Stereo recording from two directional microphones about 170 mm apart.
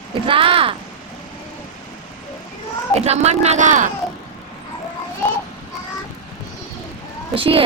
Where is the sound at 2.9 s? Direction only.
40° right (ahead or behind).